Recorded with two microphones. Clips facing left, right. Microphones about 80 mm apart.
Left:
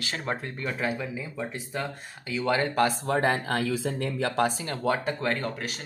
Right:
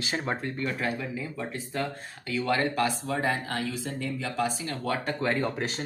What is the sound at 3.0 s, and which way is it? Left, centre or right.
Speech, left.